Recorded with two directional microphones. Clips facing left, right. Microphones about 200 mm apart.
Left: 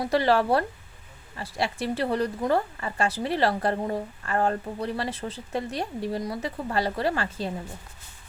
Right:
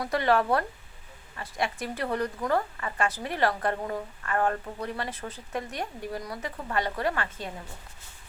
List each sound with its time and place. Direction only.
0.0 s speech: 30° left (ahead or behind)